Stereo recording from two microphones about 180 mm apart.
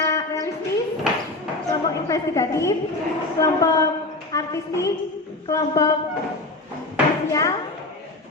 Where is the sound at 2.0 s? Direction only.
15° left (ahead or behind).